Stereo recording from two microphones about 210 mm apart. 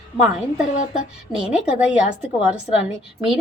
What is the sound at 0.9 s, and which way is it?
A woman's voice, 5° right (ahead or behind).